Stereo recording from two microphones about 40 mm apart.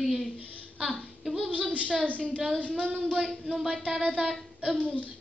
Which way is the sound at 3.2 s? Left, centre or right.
Centre.